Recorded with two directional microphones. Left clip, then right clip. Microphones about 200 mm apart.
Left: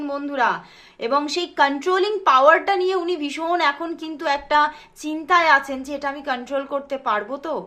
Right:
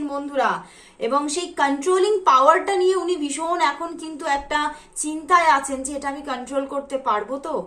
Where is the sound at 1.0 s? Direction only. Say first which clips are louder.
Left 1 dB; 40° left (ahead or behind).